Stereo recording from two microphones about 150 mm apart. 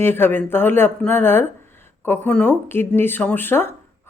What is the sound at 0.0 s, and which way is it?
Speech, 15° left (ahead or behind).